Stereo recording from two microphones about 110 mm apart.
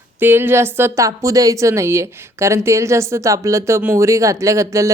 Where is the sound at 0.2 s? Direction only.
20° right (ahead or behind).